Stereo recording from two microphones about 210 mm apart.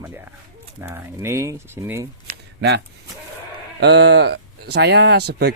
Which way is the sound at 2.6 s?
55° right (ahead or behind).